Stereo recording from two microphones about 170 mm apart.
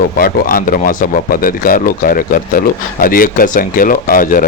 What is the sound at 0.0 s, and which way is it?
Speech, 55° left (ahead or behind).